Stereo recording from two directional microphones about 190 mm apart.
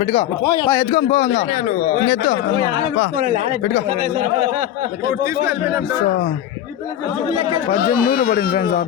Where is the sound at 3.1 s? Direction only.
45° right (ahead or behind).